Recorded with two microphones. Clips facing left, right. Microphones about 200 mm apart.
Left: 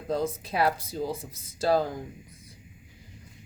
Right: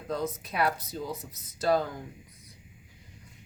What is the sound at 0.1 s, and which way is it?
Speech, 30° left (ahead or behind).